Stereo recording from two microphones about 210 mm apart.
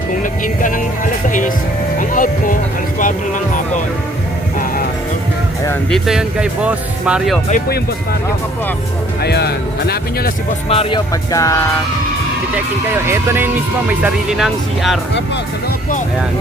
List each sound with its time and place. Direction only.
0.2 s music: 40° left (ahead or behind)
5.9 s speech: 5° right (ahead or behind)
9.2 s speech: 50° left (ahead or behind)
10.7 s music: 25° left (ahead or behind)
13.1 s speech: 10° right (ahead or behind)